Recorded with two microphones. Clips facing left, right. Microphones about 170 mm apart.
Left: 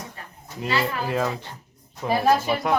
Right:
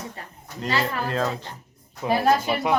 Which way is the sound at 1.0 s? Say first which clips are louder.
Left 1 dB; 10° left (ahead or behind).